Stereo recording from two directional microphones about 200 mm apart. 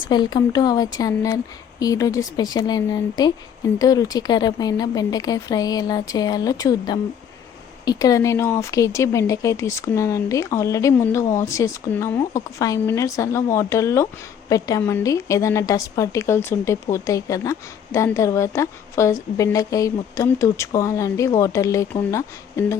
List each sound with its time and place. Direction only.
0.1 s a woman's voice: 20° left (ahead or behind)